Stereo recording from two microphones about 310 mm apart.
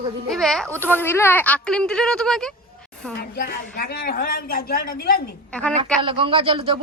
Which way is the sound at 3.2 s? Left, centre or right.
Left.